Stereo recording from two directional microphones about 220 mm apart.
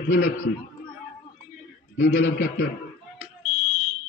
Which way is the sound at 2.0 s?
55° left (ahead or behind).